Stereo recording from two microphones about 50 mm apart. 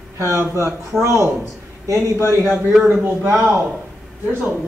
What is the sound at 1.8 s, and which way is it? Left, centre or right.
Speech, right.